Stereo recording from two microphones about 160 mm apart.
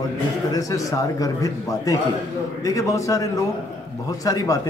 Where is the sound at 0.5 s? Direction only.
20° left (ahead or behind).